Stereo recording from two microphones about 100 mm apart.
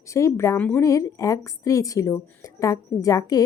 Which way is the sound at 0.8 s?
30° left (ahead or behind).